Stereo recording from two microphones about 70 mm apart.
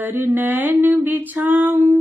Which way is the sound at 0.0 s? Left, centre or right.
Right.